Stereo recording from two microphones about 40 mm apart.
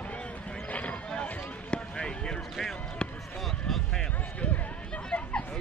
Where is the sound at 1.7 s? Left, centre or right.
Left.